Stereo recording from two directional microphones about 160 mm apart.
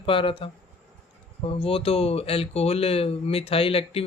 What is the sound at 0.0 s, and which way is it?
Speech, 35° left (ahead or behind).